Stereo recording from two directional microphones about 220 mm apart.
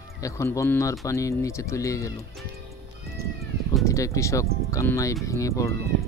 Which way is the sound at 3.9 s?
15° left (ahead or behind).